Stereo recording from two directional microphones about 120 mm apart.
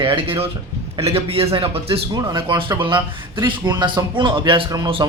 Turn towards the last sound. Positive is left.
turn(degrees=-40)  # may be behind; listen again after turning